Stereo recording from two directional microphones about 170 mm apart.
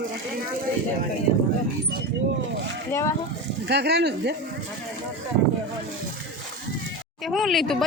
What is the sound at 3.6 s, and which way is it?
Speech, 75° right (ahead or behind).